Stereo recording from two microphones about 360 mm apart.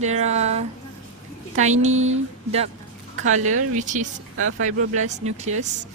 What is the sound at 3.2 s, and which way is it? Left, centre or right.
Speech, centre.